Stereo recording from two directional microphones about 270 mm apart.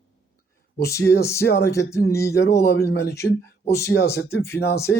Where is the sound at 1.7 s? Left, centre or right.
Centre.